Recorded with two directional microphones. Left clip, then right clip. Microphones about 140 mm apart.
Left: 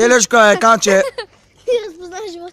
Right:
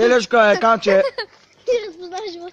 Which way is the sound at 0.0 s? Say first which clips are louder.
Left 3 dB; 35° left (ahead or behind).